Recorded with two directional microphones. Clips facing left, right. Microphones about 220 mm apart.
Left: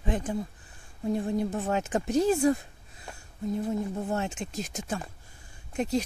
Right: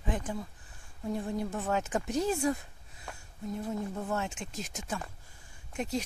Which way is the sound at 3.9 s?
25° left (ahead or behind).